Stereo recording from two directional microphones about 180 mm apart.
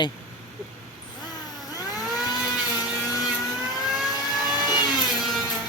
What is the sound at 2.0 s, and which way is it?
Motorboat, centre (ahead or behind).